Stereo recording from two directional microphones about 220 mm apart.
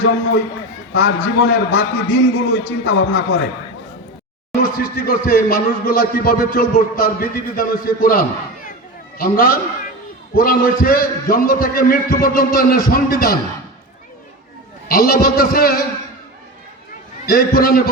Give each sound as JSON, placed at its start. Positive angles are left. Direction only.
{"t": 0.9, "sound": "a man's voice", "side_deg": 55}
{"t": 4.6, "sound": "speech", "side_deg": 40}
{"t": 14.8, "sound": "a man's voice", "side_deg": 45}
{"t": 17.2, "sound": "a man's voice", "side_deg": 45}